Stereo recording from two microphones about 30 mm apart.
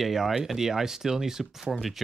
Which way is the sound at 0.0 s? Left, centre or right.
Centre.